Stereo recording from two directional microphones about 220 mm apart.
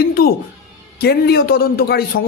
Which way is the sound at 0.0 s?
45° left (ahead or behind).